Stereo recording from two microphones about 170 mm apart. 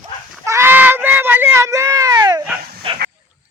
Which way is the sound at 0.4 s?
15° right (ahead or behind).